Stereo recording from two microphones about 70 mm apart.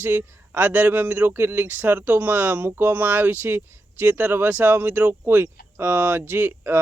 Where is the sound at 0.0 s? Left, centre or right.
Right.